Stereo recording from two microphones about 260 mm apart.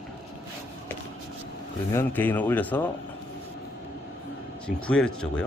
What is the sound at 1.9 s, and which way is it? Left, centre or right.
Speech, centre.